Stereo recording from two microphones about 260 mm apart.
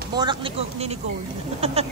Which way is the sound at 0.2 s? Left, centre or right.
Right.